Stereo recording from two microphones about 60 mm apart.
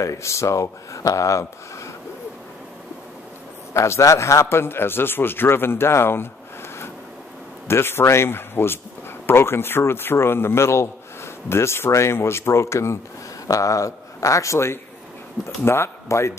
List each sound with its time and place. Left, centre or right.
0.0 s speech: left
3.7 s a man's voice: left
7.6 s a man's voice: left
13.5 s a man's voice: left